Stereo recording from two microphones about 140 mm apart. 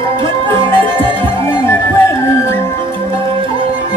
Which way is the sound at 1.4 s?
20° left (ahead or behind).